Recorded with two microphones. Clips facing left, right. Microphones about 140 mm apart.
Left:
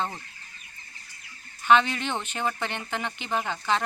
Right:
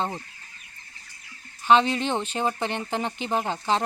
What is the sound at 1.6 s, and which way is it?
Speech, 30° right (ahead or behind).